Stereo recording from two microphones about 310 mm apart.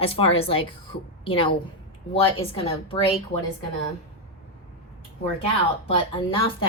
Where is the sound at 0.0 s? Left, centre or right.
Centre.